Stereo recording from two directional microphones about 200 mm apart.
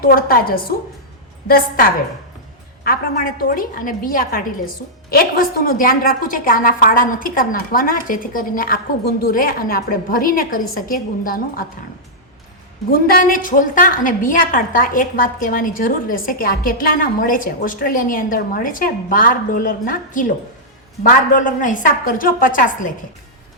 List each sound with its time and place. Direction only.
0.0 s a woman's voice: 45° left (ahead or behind)
12.9 s a woman's voice: 45° left (ahead or behind)